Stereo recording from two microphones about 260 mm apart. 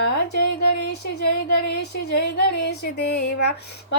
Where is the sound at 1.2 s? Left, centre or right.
Left.